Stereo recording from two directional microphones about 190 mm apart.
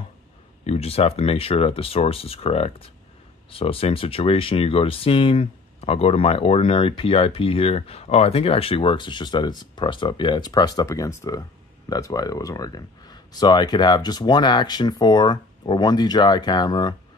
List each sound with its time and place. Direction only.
0.7 s speech: 30° left (ahead or behind)